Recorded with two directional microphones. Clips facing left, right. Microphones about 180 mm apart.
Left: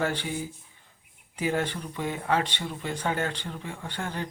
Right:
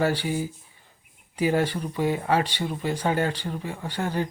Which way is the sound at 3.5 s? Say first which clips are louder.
Right 5 dB; 10° right (ahead or behind).